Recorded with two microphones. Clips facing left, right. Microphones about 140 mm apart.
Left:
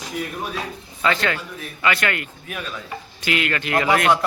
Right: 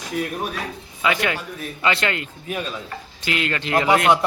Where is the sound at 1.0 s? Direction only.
10° right (ahead or behind).